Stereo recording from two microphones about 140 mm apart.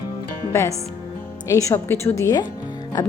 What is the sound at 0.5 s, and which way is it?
A woman's voice, 20° left (ahead or behind).